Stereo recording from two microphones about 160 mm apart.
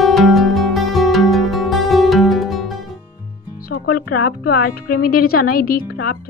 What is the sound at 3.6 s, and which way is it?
Speech, 70° left (ahead or behind).